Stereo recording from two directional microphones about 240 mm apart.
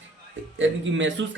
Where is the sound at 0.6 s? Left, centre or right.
Right.